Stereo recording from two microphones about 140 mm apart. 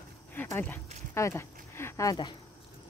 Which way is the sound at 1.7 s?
20° left (ahead or behind).